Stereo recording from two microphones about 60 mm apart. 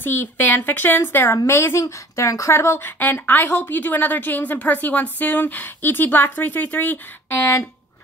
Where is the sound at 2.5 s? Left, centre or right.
Left.